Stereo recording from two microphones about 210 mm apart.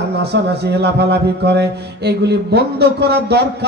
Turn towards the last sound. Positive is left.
turn(degrees=-50)  # may be behind; listen again after turning